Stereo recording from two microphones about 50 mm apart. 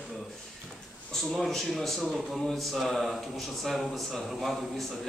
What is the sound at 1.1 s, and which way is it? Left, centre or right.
Speech, centre.